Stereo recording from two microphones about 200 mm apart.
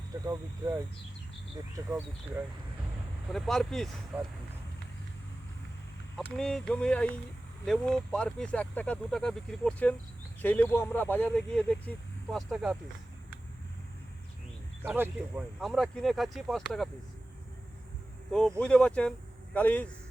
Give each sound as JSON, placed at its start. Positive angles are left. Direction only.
{"t": 0.1, "sound": "speech", "side_deg": -15}
{"t": 3.2, "sound": "speech", "side_deg": 0}
{"t": 6.1, "sound": "speech", "side_deg": 5}
{"t": 14.8, "sound": "speech", "side_deg": -10}
{"t": 18.3, "sound": "speech", "side_deg": 5}